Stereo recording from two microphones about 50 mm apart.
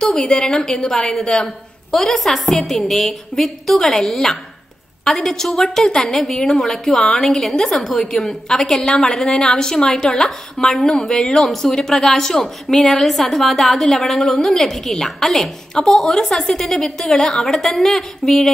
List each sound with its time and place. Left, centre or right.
0.0 s a woman's voice: centre